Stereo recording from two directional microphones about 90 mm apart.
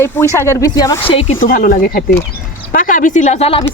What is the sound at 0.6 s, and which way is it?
Speech, 40° left (ahead or behind).